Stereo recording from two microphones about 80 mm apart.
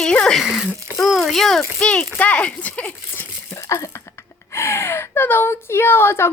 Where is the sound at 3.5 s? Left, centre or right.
Left.